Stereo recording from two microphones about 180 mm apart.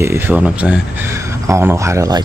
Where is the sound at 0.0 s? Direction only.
10° right (ahead or behind).